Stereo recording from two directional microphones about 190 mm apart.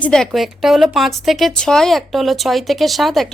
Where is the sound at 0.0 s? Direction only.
5° left (ahead or behind).